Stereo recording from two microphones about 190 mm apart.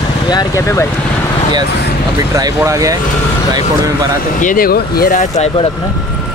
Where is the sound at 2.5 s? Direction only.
15° right (ahead or behind).